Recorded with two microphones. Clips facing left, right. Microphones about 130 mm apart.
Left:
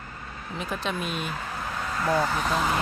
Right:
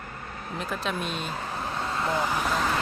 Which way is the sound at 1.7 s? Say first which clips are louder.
Even; 25° right (ahead or behind).